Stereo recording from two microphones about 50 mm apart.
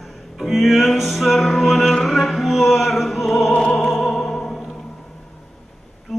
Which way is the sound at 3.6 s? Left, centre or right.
Centre.